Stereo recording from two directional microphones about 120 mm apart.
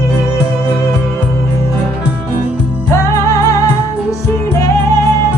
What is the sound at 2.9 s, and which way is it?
Music, 25° left (ahead or behind).